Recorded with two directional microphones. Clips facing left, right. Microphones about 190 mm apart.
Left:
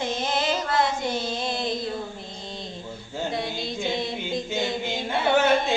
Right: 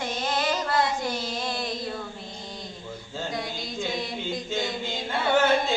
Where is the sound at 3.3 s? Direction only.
25° left (ahead or behind).